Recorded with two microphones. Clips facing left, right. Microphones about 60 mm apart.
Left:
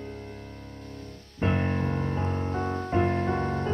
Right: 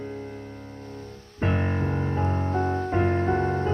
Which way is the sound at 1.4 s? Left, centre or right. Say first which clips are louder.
Right 1 dB; centre.